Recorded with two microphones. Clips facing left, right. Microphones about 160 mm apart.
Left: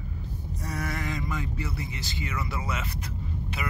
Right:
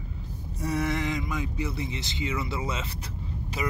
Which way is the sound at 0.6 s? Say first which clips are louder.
Right 6 dB; 20° right (ahead or behind).